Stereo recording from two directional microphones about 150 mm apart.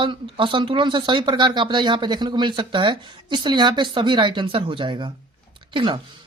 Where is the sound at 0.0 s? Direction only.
35° right (ahead or behind).